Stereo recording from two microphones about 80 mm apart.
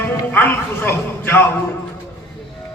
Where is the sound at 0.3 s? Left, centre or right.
Left.